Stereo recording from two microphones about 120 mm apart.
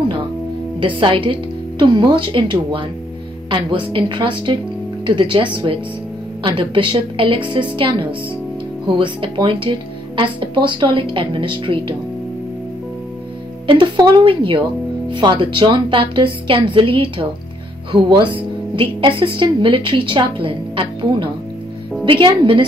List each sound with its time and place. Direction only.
0.7 s speech: 45° right (ahead or behind)
13.7 s speech: 40° right (ahead or behind)